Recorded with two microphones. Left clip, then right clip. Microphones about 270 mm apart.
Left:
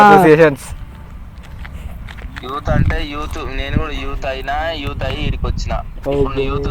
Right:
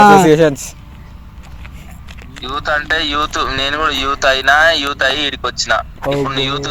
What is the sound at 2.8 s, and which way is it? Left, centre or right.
Speech, right.